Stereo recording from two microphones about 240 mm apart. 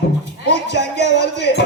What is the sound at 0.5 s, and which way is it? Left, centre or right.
Music, left.